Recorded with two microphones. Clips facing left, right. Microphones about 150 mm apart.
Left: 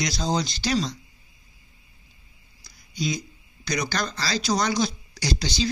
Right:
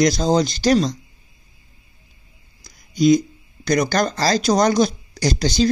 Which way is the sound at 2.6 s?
50° right (ahead or behind).